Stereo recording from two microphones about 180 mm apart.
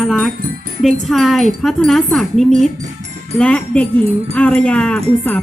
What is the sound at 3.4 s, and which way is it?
Speech, 5° left (ahead or behind).